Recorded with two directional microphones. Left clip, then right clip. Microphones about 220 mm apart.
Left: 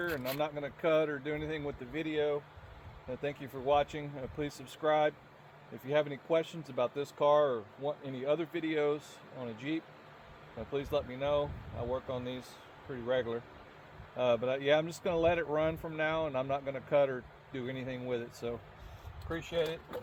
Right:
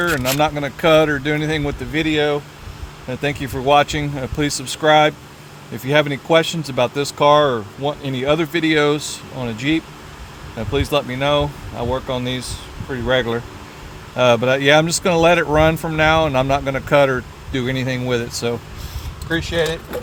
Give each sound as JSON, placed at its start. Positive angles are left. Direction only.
{"t": 0.0, "sound": "speech", "side_deg": -60}